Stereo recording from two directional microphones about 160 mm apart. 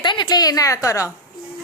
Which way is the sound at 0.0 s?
30° left (ahead or behind).